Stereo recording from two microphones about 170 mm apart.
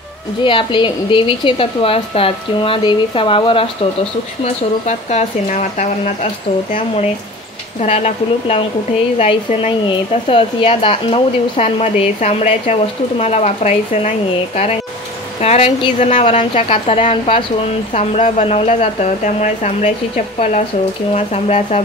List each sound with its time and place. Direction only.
0.4 s a woman's voice: 30° left (ahead or behind)
4.8 s speech: 45° left (ahead or behind)
7.8 s a woman's voice: 40° left (ahead or behind)